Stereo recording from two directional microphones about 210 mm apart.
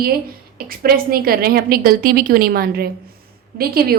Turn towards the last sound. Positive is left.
turn(degrees=-45)  # may be behind; listen again after turning